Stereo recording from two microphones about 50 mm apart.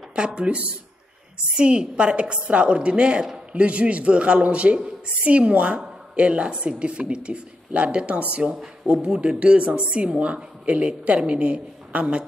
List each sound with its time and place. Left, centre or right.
0.1 s a woman's voice: right